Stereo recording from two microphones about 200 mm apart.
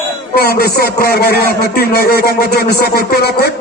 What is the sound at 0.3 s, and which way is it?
A man's voice, 50° left (ahead or behind).